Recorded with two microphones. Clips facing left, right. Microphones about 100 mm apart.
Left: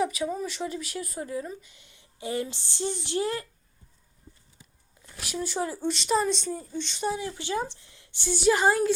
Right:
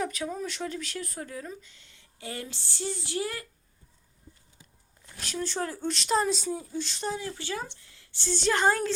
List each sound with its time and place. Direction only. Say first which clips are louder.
0.0 s speech: left 4 dB; 5° left (ahead or behind); by 3.4 s 25° left (ahead or behind)
5.3 s speech: left 2 dB; 10° left (ahead or behind)
7.1 s speech: left 4 dB; 20° left (ahead or behind)